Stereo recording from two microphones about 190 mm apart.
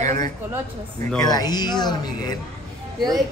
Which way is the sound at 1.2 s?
20° left (ahead or behind).